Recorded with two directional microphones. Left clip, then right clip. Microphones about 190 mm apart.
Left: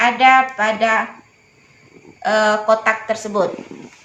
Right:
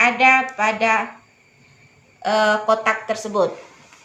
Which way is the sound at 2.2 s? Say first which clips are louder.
Left 2 dB; 5° right (ahead or behind).